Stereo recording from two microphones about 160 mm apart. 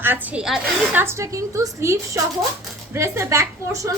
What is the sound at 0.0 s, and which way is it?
Speech, 10° right (ahead or behind).